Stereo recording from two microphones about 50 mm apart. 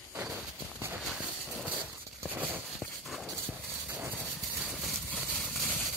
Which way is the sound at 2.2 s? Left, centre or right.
Right.